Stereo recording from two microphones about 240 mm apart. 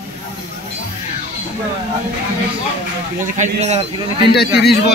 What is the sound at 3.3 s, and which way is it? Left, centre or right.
Speech, right.